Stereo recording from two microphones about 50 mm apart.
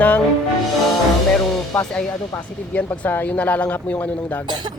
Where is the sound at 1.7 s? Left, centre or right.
Left.